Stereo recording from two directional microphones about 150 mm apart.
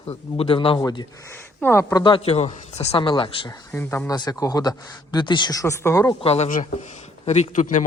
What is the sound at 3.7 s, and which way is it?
Speech, 15° left (ahead or behind).